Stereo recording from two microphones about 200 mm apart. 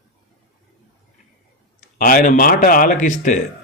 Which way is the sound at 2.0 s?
45° left (ahead or behind).